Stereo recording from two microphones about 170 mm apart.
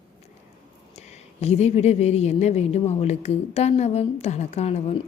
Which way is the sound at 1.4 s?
40° left (ahead or behind).